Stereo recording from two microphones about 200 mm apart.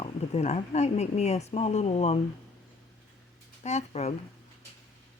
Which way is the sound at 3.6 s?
35° left (ahead or behind).